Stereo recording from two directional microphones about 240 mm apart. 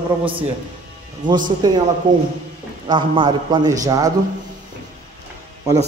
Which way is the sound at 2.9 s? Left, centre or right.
Centre.